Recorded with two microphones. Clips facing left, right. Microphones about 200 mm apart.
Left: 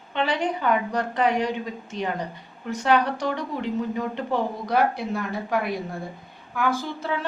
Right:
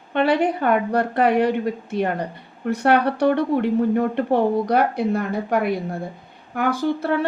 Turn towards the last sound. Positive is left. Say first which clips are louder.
# right 7 dB
turn(degrees=-60)  # may be behind; listen again after turning